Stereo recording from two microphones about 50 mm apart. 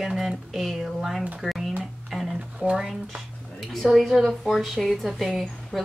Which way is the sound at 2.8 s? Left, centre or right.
Centre.